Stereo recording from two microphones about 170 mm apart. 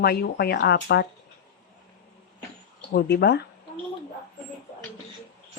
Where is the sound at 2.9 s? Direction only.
70° left (ahead or behind).